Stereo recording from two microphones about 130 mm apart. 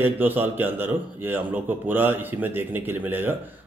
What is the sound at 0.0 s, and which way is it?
A man's voice, 15° right (ahead or behind).